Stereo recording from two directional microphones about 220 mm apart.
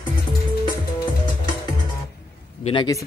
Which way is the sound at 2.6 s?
20° left (ahead or behind).